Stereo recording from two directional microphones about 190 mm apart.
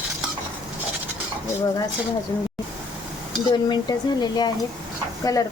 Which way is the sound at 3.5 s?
20° left (ahead or behind).